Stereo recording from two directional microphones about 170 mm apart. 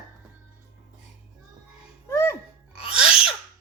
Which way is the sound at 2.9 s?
5° right (ahead or behind).